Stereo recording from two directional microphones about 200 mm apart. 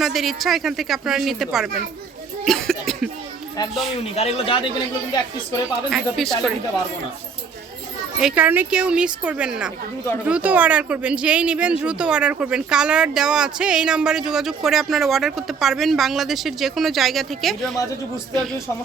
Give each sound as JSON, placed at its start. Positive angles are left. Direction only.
{"t": 0.0, "sound": "speech", "side_deg": 0}
{"t": 2.4, "sound": "cough", "side_deg": 0}
{"t": 4.1, "sound": "speech", "side_deg": 30}
{"t": 5.9, "sound": "speech", "side_deg": 0}
{"t": 8.2, "sound": "speech", "side_deg": -10}